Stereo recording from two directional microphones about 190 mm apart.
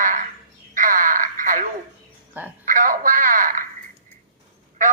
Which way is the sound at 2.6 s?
45° right (ahead or behind).